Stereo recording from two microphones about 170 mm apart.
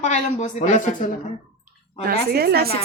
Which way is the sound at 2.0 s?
70° right (ahead or behind).